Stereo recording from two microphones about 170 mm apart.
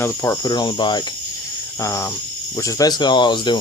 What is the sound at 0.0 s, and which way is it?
Speech, 15° left (ahead or behind).